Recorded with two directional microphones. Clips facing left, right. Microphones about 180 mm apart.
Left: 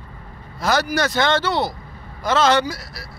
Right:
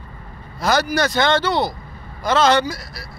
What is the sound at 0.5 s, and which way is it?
Speech, centre (ahead or behind).